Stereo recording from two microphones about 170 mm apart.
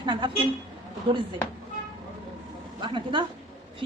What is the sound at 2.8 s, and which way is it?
Speech, 30° right (ahead or behind).